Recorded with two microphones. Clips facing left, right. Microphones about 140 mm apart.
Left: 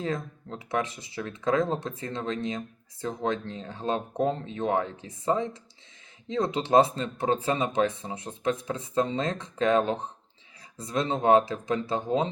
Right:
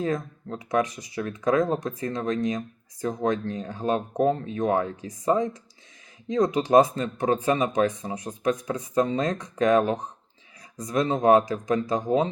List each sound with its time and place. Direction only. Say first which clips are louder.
0.0 s speech: right 4 dB; 25° left (ahead or behind)